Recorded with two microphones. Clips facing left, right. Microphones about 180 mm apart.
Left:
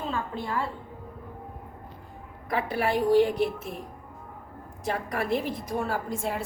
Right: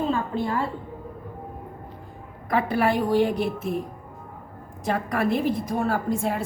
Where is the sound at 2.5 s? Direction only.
60° right (ahead or behind).